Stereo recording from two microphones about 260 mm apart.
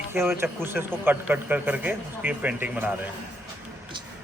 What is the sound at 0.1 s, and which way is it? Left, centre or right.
A woman's voice, centre.